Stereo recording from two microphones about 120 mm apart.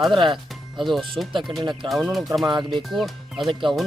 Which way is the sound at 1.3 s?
40° right (ahead or behind).